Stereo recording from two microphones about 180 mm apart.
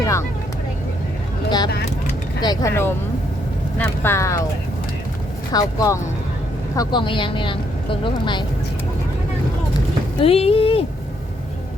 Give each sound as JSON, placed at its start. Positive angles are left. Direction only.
{"t": 0.0, "sound": "vehicle", "side_deg": 15}
{"t": 1.5, "sound": "speech", "side_deg": 25}
{"t": 5.5, "sound": "speech", "side_deg": 20}
{"t": 10.2, "sound": "speech", "side_deg": 35}